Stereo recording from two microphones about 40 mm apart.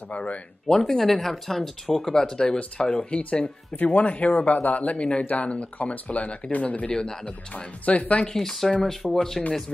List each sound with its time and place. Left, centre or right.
0.1 s speech: left
0.7 s speech: centre
2.2 s speech: centre; by 4.9 s left
4.9 s speech: left
5.2 s speech: left
7.5 s speech: left
8.4 s speech: centre